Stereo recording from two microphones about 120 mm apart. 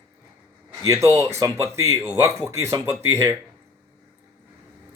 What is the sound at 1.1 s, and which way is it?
Speech, 25° right (ahead or behind).